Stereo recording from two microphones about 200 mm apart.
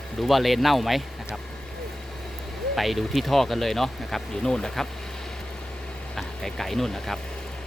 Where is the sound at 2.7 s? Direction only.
Centre (ahead or behind).